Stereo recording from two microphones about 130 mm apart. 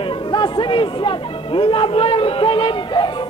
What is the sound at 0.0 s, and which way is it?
Chatter, 40° left (ahead or behind).